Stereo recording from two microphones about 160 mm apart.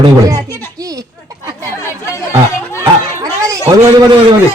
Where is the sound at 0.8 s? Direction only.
20° right (ahead or behind).